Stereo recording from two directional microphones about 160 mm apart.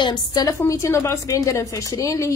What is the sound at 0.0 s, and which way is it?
A woman's voice, 25° left (ahead or behind).